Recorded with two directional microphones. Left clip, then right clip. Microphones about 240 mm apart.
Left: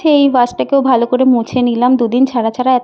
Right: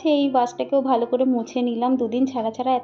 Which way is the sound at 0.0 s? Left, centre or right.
Left.